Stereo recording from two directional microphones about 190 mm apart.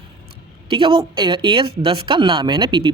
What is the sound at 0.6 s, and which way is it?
Speech, 30° right (ahead or behind).